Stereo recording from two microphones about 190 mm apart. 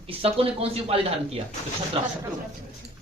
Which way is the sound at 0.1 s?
30° right (ahead or behind).